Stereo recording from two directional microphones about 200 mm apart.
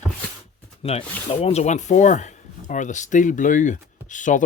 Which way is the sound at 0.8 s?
30° left (ahead or behind).